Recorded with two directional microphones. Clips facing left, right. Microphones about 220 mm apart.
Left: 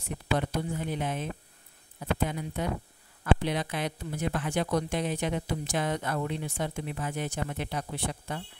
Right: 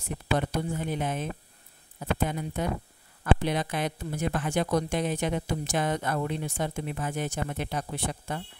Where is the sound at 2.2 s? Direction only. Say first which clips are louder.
Right 2 dB; 45° right (ahead or behind).